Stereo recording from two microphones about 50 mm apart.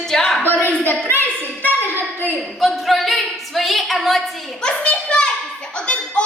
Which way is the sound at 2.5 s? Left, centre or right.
Centre.